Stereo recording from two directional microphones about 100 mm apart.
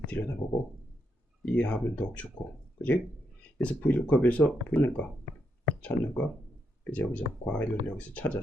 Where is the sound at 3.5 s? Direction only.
15° left (ahead or behind).